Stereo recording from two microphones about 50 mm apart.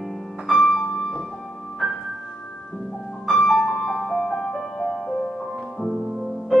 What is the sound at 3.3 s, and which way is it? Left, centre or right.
Music, centre.